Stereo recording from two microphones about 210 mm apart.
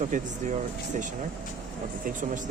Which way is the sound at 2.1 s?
40° right (ahead or behind).